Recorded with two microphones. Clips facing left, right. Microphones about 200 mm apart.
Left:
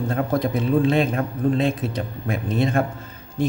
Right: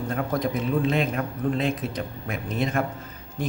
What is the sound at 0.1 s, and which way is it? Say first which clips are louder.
A man's voice: left 3 dB; 30° left (ahead or behind).